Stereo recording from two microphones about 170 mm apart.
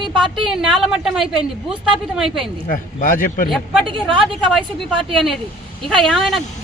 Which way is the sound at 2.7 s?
55° left (ahead or behind).